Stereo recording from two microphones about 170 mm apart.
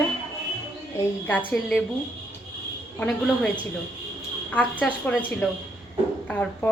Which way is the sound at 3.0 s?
5° left (ahead or behind).